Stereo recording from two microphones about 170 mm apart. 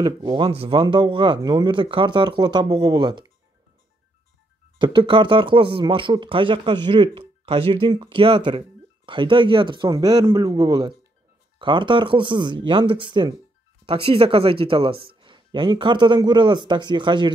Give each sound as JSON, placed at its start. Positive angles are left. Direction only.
{"t": 0.0, "sound": "speech", "side_deg": -25}
{"t": 4.7, "sound": "speech", "side_deg": -30}